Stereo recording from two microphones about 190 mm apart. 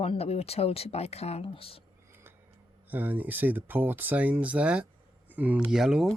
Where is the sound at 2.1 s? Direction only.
10° right (ahead or behind).